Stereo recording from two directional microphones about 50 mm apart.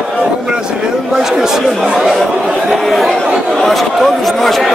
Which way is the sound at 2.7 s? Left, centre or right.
Centre.